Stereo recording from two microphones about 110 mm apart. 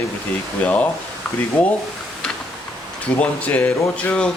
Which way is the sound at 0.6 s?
15° left (ahead or behind).